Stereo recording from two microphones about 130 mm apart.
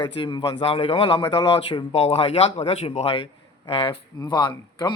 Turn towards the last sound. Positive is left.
turn(degrees=35)  # may be behind; listen again after turning